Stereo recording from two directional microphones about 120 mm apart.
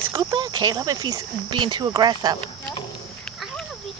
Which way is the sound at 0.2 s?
40° right (ahead or behind).